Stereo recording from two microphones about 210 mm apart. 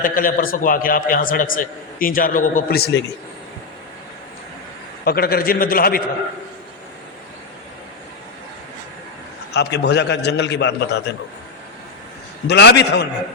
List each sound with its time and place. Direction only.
0.0 s a man's voice: 40° left (ahead or behind)
5.0 s a man's voice: 45° left (ahead or behind)
9.5 s a man's voice: 55° left (ahead or behind)
12.5 s a man's voice: 50° left (ahead or behind)